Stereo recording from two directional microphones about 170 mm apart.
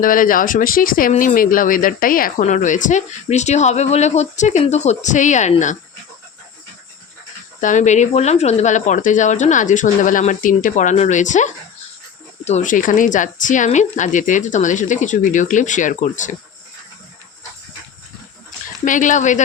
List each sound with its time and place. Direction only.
0.0 s speech: 55° left (ahead or behind)
7.6 s speech: 45° left (ahead or behind)
18.9 s speech: 50° left (ahead or behind)